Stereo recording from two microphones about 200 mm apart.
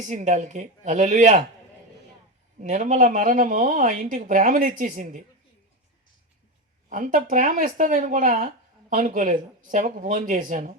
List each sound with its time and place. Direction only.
0.1 s speech: 35° right (ahead or behind)
2.6 s speech: 35° right (ahead or behind)
6.9 s speech: 40° right (ahead or behind)